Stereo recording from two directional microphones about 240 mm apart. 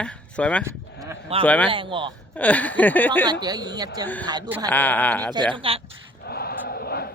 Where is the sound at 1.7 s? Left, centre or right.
Right.